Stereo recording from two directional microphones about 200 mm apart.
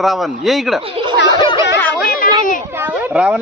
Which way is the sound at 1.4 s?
25° left (ahead or behind).